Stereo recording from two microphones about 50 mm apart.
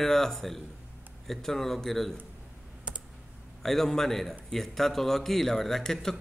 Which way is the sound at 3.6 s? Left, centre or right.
Centre.